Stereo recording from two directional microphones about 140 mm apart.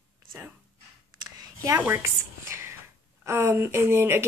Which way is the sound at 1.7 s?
15° right (ahead or behind).